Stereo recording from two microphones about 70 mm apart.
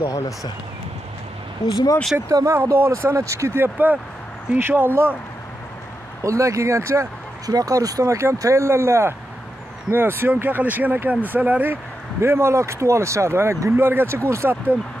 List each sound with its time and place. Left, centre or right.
0.0 s speech: left
1.6 s speech: left
2.2 s speech: right
2.5 s speech: right
3.5 s speech: right
6.2 s speech: right
7.4 s speech: right